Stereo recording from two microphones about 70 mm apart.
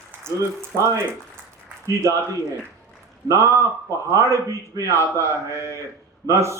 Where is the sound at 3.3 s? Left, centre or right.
Right.